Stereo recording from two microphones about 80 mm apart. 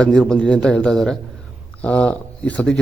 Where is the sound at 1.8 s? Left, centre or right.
Centre.